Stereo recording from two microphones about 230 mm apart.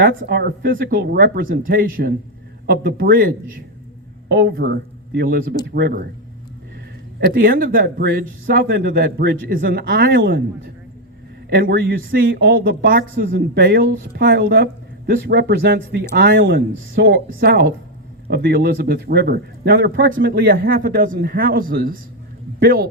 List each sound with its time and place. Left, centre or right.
0.2 s speech: right
7.3 s speech: right
11.4 s speech: right